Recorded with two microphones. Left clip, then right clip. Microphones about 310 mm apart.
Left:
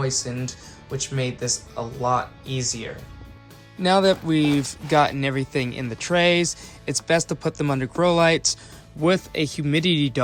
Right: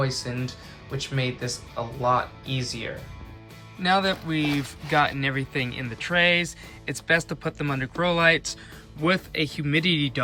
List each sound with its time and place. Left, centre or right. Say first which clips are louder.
0.0 s speech: left 2 dB; centre